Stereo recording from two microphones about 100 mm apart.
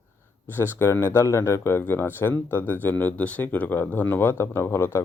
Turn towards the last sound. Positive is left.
turn(degrees=25)  # may be behind; listen again after turning